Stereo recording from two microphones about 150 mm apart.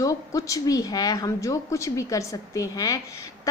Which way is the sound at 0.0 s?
20° left (ahead or behind).